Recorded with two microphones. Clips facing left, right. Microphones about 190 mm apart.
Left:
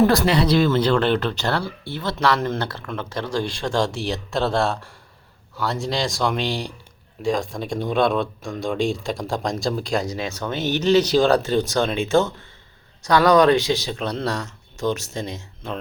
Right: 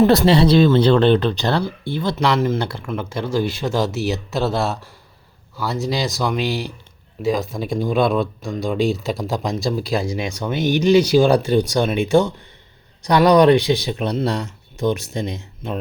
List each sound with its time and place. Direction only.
0.0 s speech: 20° right (ahead or behind)